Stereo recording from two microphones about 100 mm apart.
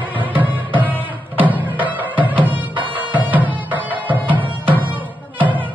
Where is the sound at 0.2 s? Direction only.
15° right (ahead or behind).